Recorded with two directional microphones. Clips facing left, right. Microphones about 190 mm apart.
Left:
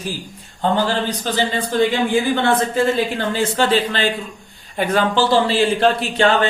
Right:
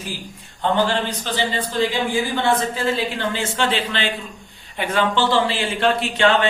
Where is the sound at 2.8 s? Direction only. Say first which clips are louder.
Left 3 dB; 40° left (ahead or behind).